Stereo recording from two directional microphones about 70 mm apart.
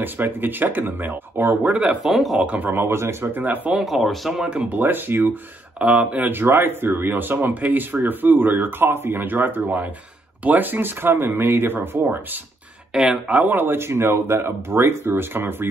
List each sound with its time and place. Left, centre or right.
0.0 s speech: right
1.6 s speech: centre
2.0 s speech: centre
2.4 s speech: right
3.3 s speech: right
3.8 s speech: centre
4.7 s speech: right
5.8 s speech: centre
6.4 s speech: right
12.9 s speech: centre
13.3 s speech: right